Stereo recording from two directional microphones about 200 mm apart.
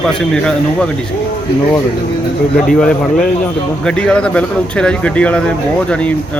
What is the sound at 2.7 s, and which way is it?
A man's voice, 5° left (ahead or behind).